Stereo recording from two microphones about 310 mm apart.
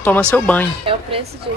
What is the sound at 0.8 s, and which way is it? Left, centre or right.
Speech, centre.